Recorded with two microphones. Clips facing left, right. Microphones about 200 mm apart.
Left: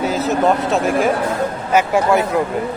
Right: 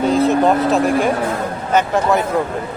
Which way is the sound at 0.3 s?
Centre (ahead or behind).